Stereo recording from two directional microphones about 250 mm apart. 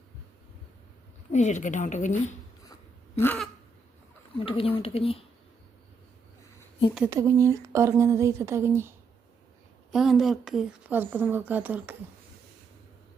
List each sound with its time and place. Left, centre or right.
1.3 s speech: left
3.2 s a sound: centre
4.4 s speech: left
6.9 s speech: centre
9.9 s speech: centre